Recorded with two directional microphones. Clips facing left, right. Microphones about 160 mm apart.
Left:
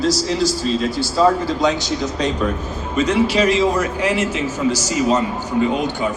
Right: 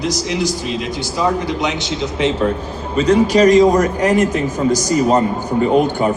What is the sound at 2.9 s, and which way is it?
Speech, 35° right (ahead or behind).